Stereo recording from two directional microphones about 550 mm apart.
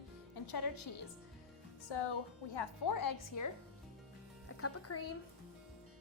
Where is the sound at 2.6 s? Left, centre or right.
Left.